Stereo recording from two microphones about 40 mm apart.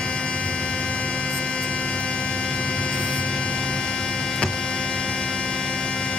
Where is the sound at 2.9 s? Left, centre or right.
Centre.